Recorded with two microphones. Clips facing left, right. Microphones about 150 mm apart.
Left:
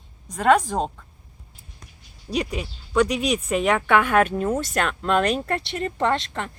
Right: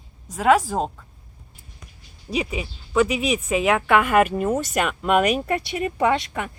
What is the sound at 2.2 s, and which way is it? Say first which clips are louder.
Speech: even; 5° right (ahead or behind).